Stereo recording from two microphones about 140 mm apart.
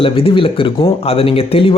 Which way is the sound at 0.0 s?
40° left (ahead or behind).